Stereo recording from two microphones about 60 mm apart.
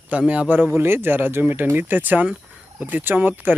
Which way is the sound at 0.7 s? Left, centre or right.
Right.